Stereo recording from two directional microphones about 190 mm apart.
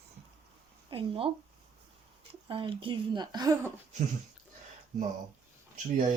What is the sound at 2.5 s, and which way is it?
Speech, 25° right (ahead or behind).